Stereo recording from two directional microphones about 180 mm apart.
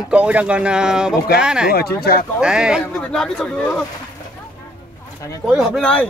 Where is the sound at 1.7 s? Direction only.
60° left (ahead or behind).